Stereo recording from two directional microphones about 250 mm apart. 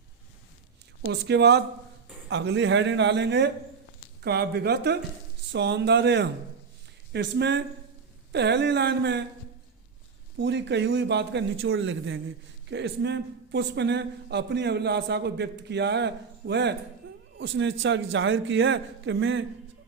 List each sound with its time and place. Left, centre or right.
1.0 s a man's voice: right
10.3 s a man's voice: right